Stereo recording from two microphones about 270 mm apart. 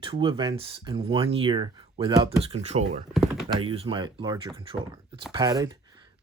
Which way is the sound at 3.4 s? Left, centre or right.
Centre.